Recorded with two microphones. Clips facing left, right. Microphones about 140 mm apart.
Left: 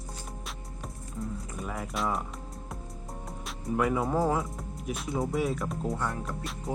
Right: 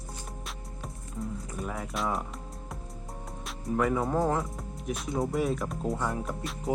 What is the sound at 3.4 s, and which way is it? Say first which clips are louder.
Speech: even; centre (ahead or behind).